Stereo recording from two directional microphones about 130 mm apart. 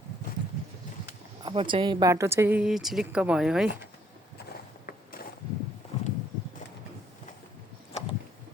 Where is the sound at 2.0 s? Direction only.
25° right (ahead or behind).